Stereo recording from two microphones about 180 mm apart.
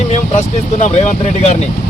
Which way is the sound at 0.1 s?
40° left (ahead or behind).